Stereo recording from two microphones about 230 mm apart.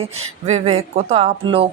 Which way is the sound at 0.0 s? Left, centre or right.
Right.